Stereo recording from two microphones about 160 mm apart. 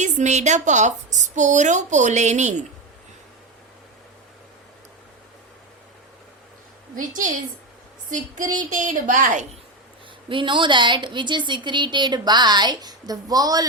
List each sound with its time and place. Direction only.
0.0 s a woman's voice: 50° right (ahead or behind)
6.9 s a woman's voice: 55° right (ahead or behind)
10.2 s speech: 30° right (ahead or behind)